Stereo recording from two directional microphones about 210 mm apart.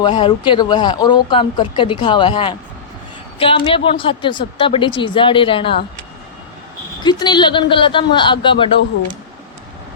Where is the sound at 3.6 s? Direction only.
25° left (ahead or behind).